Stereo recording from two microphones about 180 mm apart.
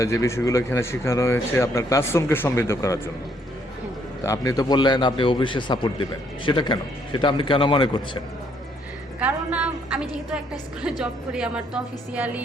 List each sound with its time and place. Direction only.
0.0 s speech: 15° left (ahead or behind)
4.3 s a man's voice: 20° left (ahead or behind)
9.2 s a sound: 5° right (ahead or behind)
11.0 s speech: 5° right (ahead or behind)